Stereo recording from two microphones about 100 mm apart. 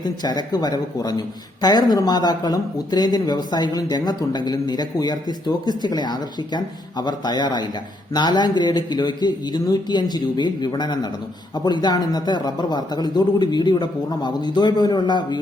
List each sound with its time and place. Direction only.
0.0 s speech: 45° left (ahead or behind)